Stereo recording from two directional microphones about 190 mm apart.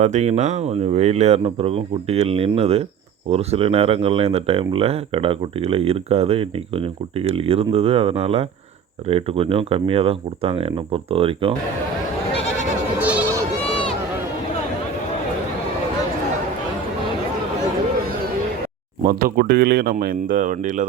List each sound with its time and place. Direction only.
0.0 s speech: 35° right (ahead or behind)
13.0 s goat: 10° right (ahead or behind)
19.0 s speech: 50° right (ahead or behind)